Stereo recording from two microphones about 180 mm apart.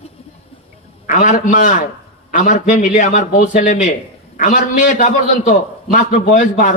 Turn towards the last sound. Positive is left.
turn(degrees=45)  # may be behind; listen again after turning